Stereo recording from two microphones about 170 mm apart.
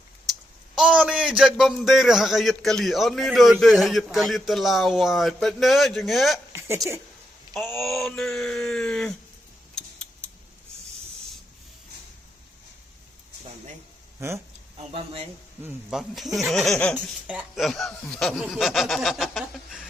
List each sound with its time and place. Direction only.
0.3 s a sound: centre (ahead or behind)
0.8 s a man's voice: 5° right (ahead or behind)
7.5 s a man's voice: centre (ahead or behind)
9.7 s a sound: 5° left (ahead or behind)
14.8 s speech: 35° right (ahead or behind)
15.6 s a man's voice: centre (ahead or behind)